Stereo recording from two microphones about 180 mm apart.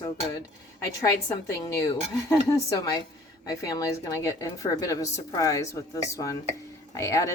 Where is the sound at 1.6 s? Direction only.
15° left (ahead or behind).